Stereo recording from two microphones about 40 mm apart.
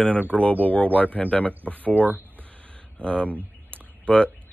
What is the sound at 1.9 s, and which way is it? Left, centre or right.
Speech, right.